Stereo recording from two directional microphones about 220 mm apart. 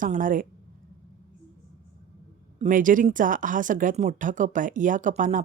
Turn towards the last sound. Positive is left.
turn(degrees=-35)  # may be behind; listen again after turning